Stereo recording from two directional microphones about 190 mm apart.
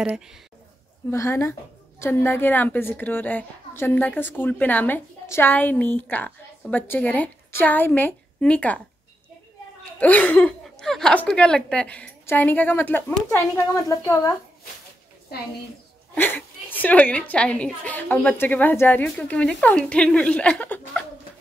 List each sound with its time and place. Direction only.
0.0 s speech: 5° right (ahead or behind)
1.1 s a woman's voice: 15° left (ahead or behind)
9.9 s a woman's voice: 10° left (ahead or behind)
16.2 s a woman's voice: 10° left (ahead or behind)